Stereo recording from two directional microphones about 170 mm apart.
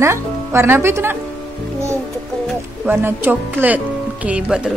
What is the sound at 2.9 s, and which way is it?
Speech, 15° right (ahead or behind).